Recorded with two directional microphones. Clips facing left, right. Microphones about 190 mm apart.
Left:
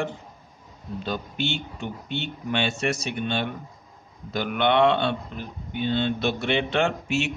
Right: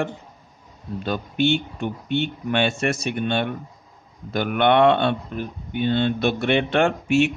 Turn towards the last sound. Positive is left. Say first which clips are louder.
# right 6 dB
turn(degrees=-55)  # may be behind; listen again after turning